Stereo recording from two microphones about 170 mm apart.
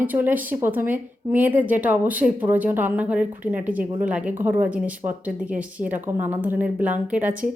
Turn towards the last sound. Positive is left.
turn(degrees=-10)  # may be behind; listen again after turning